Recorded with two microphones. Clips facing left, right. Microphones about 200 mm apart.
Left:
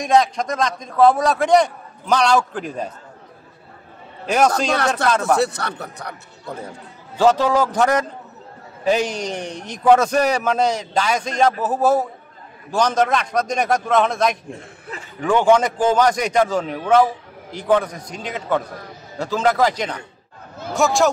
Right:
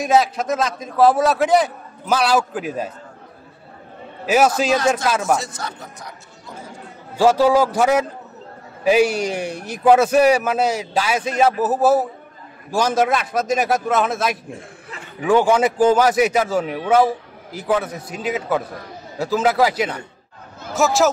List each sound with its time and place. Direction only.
0.0 s a man's voice: 5° right (ahead or behind)
4.3 s a man's voice: 5° right (ahead or behind)
4.7 s speech: 65° left (ahead or behind)
7.2 s a man's voice: 10° right (ahead or behind)